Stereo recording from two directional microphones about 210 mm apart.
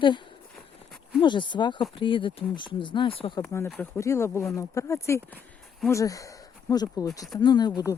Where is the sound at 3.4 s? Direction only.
10° left (ahead or behind).